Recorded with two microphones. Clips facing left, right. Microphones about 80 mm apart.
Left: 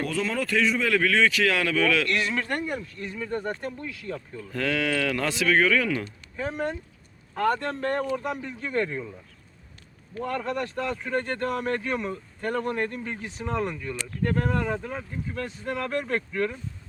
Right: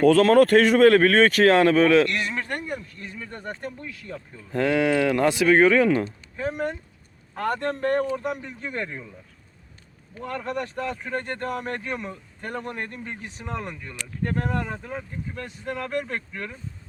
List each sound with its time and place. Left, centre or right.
0.1 s speech: right
0.9 s a man's voice: right
3.5 s speech: centre
4.0 s speech: right
6.5 s speech: centre
10.2 s speech: centre
11.3 s speech: right
11.9 s speech: centre
13.4 s speech: centre
14.2 s speech: right
14.8 s speech: centre